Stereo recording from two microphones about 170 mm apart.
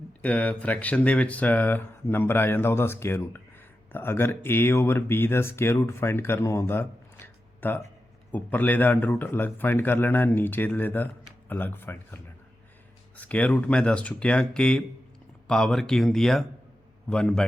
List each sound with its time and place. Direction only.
0.2 s speech: 10° left (ahead or behind)